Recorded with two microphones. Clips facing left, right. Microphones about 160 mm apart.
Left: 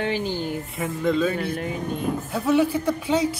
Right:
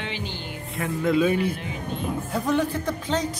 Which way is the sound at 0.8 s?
5° right (ahead or behind).